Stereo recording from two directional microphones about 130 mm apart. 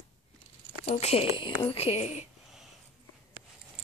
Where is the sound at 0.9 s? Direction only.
55° left (ahead or behind).